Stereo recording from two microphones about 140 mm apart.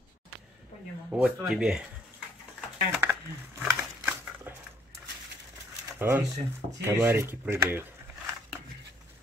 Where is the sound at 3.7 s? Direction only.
10° right (ahead or behind).